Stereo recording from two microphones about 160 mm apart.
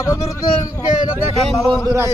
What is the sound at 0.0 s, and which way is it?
Speech, 20° left (ahead or behind).